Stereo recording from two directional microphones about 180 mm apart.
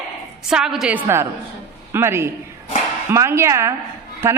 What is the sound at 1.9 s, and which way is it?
A woman's voice, 15° right (ahead or behind).